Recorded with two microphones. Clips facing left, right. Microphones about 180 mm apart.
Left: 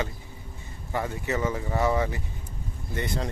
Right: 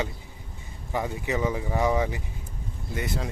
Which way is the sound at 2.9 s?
5° right (ahead or behind).